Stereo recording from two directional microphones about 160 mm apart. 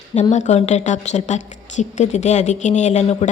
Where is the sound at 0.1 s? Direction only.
45° left (ahead or behind).